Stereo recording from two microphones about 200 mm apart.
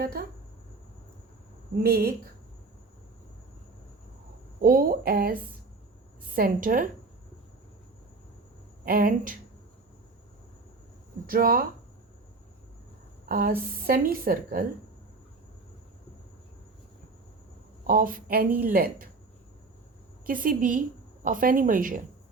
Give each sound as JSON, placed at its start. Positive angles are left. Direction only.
{"t": 0.0, "sound": "a woman's voice", "side_deg": -50}
{"t": 1.8, "sound": "a woman's voice", "side_deg": -50}
{"t": 4.6, "sound": "a woman's voice", "side_deg": -45}
{"t": 8.8, "sound": "a woman's voice", "side_deg": -45}
{"t": 11.3, "sound": "a woman's voice", "side_deg": -45}
{"t": 13.2, "sound": "a woman's voice", "side_deg": -45}
{"t": 17.8, "sound": "a woman's voice", "side_deg": -45}
{"t": 20.2, "sound": "a woman's voice", "side_deg": -45}